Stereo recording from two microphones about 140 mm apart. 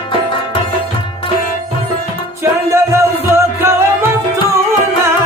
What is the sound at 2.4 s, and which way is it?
Music, 20° right (ahead or behind).